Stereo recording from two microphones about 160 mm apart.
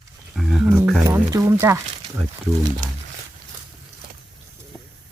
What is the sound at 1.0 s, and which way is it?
Speech, 20° right (ahead or behind).